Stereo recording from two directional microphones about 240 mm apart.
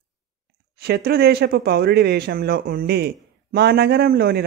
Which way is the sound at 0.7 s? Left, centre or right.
Right.